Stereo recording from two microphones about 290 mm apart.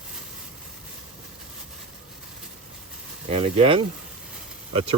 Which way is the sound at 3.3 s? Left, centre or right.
Centre.